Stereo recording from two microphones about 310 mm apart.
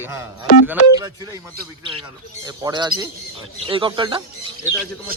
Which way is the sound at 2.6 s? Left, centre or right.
Centre.